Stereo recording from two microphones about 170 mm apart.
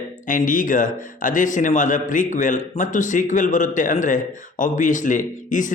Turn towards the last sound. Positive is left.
turn(degrees=50)  # may be behind; listen again after turning